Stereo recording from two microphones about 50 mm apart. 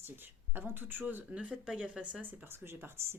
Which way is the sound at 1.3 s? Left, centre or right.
Centre.